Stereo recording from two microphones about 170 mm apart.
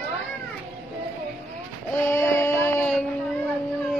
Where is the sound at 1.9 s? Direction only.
15° left (ahead or behind).